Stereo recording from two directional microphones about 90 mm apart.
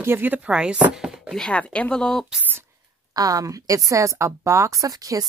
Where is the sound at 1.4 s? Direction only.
15° left (ahead or behind).